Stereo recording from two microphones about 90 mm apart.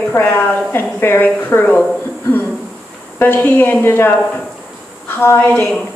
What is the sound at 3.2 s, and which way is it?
A woman's voice, 20° left (ahead or behind).